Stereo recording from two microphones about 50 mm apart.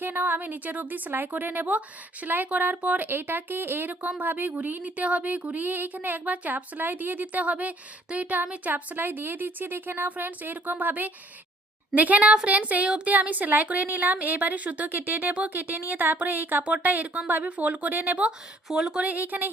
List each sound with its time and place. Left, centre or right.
0.0 s speech: right
12.5 s child singing: right
13.1 s speech: right
18.3 s speech: centre
19.0 s speech: right